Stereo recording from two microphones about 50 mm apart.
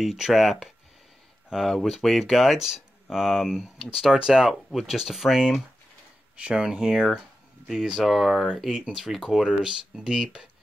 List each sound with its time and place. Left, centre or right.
0.0 s speech: centre
6.3 s speech: centre